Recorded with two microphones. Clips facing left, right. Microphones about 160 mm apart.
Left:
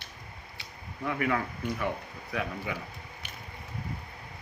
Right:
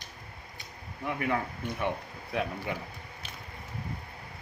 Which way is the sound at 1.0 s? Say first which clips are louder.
Left 1 dB; 20° right (ahead or behind).